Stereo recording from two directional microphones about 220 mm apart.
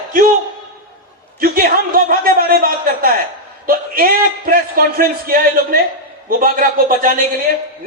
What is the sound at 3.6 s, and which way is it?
A man's voice, 40° right (ahead or behind).